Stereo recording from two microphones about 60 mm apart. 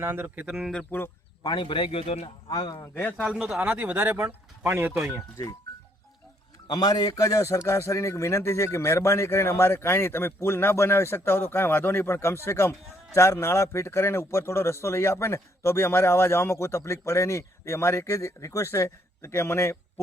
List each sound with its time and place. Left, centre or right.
0.0 s speech: right
0.4 s speech: centre
0.9 s speech: left
2.5 s speech: left
2.9 s speech: left
3.3 s speech: centre
3.6 s speech: right
6.7 s a man's voice: left